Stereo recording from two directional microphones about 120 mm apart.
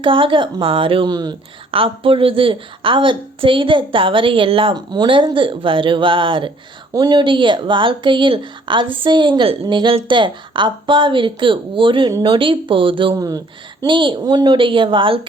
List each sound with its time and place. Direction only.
0.0 s speech: 45° right (ahead or behind)
13.1 s speech: 30° right (ahead or behind)
13.8 s speech: 40° right (ahead or behind)